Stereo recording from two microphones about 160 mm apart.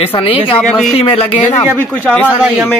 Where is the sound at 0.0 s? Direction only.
35° left (ahead or behind).